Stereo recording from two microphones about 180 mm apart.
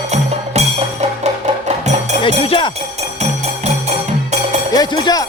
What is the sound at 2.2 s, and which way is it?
Music, 30° left (ahead or behind).